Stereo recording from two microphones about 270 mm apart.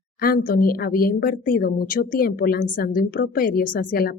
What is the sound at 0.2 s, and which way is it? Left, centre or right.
Speech, left.